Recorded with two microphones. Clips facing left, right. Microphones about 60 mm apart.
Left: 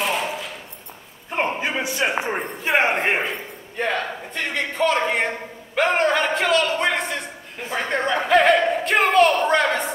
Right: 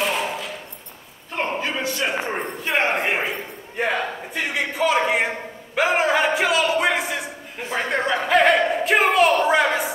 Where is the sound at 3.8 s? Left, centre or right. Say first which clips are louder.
Right 1 dB; centre.